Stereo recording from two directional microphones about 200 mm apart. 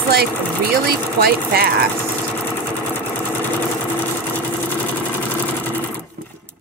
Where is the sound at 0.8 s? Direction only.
50° right (ahead or behind).